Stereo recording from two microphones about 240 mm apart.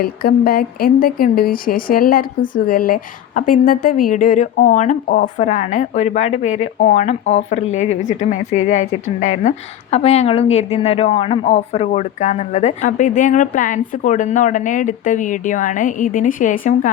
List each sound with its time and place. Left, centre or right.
0.0 s speech: left